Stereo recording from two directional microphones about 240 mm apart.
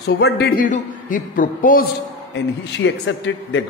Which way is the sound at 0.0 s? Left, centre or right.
Left.